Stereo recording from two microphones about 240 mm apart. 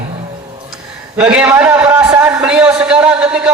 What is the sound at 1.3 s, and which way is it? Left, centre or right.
A man's voice, centre.